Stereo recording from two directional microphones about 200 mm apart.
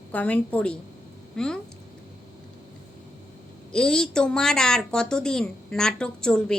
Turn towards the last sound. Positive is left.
turn(degrees=5)  # may be behind; listen again after turning